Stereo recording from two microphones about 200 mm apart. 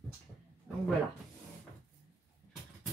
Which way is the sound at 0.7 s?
5° right (ahead or behind).